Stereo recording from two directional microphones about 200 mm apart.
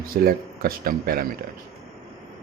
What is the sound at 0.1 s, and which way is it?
Speech, 50° right (ahead or behind).